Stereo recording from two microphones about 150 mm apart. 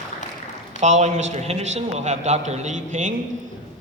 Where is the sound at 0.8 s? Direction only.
50° right (ahead or behind).